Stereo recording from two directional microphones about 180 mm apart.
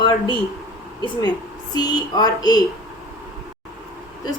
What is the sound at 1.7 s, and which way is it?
Speech, 20° left (ahead or behind).